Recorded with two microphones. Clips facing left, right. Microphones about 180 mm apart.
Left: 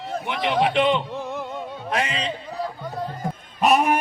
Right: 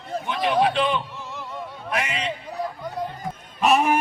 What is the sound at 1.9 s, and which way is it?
Speech, 30° left (ahead or behind).